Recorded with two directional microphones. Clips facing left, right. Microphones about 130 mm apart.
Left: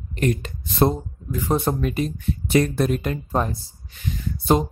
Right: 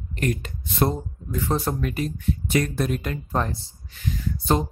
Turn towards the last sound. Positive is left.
turn(degrees=15)  # may be behind; listen again after turning